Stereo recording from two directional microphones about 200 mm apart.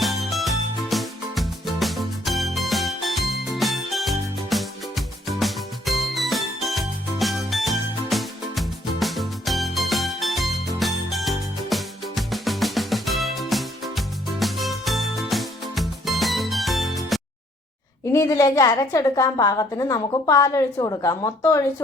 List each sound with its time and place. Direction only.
0.0 s music: centre (ahead or behind)
18.1 s a woman's voice: 15° left (ahead or behind)